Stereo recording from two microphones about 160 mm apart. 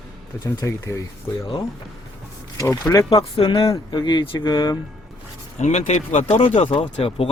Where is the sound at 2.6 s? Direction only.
20° left (ahead or behind).